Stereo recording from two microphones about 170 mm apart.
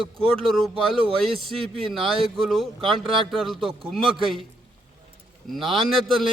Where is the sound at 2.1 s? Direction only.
30° right (ahead or behind).